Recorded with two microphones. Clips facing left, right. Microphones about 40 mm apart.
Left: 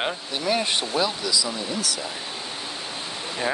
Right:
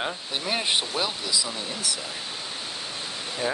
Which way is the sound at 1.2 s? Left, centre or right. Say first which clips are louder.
Left 3 dB; right.